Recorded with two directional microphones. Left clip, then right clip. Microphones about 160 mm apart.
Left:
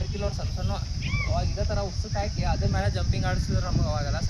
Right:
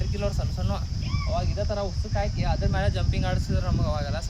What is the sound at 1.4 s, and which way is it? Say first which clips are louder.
Speech: right 2 dB; 5° right (ahead or behind).